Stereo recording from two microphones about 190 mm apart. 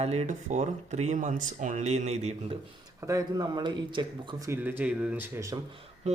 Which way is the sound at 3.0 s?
15° right (ahead or behind).